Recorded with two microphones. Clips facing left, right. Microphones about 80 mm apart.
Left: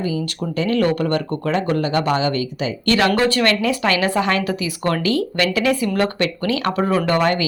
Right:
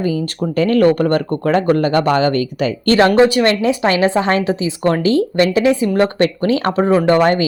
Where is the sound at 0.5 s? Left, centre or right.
Right.